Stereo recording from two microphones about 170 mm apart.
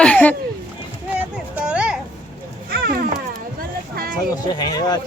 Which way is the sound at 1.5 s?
5° right (ahead or behind).